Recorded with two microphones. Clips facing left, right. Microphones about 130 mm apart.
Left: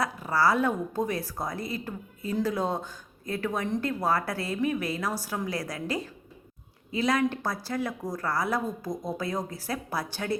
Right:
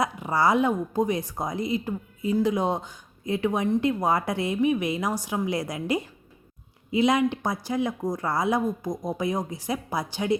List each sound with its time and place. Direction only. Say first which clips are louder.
0.0 s a woman's voice: right 2 dB; 20° right (ahead or behind)